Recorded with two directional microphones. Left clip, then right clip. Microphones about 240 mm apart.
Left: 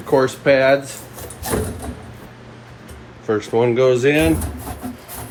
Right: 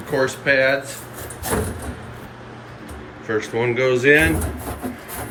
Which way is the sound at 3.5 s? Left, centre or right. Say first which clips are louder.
Left 5 dB; centre.